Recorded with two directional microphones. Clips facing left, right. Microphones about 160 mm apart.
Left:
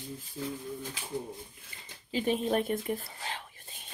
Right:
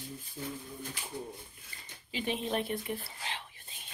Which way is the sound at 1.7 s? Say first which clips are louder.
Even; 25° left (ahead or behind).